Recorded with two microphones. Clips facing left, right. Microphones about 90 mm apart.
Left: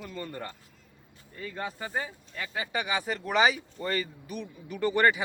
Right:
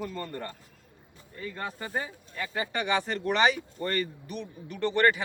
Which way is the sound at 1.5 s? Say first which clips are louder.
Even; 5° left (ahead or behind).